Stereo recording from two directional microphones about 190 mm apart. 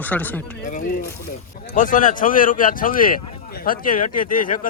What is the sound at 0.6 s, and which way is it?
Speech, 45° left (ahead or behind).